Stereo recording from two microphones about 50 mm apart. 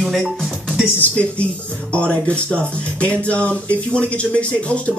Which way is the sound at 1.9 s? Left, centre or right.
Left.